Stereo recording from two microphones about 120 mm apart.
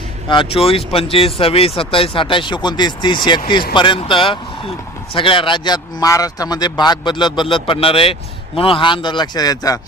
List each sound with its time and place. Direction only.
0.3 s a man's voice: 45° left (ahead or behind); by 9.8 s 30° left (ahead or behind)